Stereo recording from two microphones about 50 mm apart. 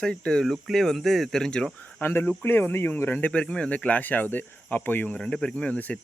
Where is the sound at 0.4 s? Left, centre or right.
Centre.